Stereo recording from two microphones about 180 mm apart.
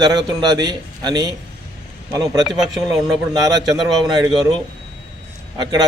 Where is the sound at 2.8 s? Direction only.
20° right (ahead or behind).